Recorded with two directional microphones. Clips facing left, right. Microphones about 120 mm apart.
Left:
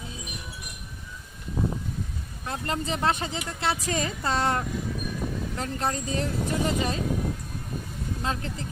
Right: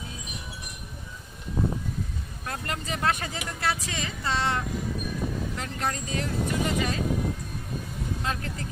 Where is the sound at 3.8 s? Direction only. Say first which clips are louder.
Left 4 dB; 40° left (ahead or behind).